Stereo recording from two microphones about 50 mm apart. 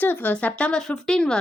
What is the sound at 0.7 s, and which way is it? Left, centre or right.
Speech, centre.